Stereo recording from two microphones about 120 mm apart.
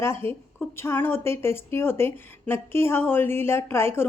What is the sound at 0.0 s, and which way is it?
A woman's voice, 20° left (ahead or behind).